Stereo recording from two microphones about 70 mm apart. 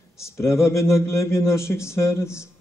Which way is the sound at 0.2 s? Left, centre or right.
Left.